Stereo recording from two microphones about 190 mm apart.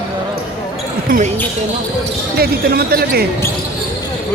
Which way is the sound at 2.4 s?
55° right (ahead or behind).